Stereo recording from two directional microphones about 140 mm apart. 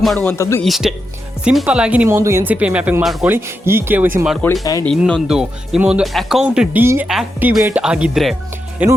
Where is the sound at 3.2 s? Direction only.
15° right (ahead or behind).